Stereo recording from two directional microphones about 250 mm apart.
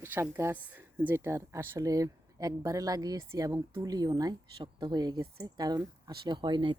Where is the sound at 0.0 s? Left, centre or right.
Centre.